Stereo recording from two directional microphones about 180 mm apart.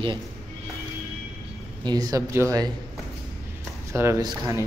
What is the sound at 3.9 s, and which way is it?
Speech, 15° right (ahead or behind).